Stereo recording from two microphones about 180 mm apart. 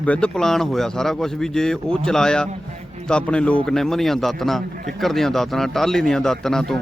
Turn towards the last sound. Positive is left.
turn(degrees=5)  # may be behind; listen again after turning